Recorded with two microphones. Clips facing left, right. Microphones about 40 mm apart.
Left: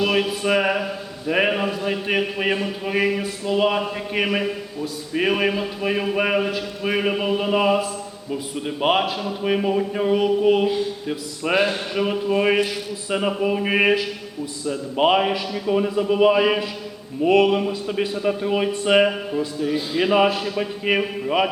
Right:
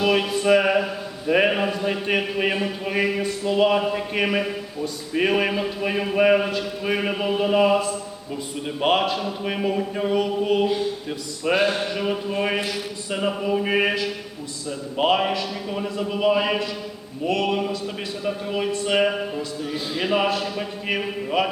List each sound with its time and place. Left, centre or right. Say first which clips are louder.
0.0 s a sound: even; centre
1.3 s a man's voice: right 1 dB; centre
19.6 s a man's voice: left 5 dB; centre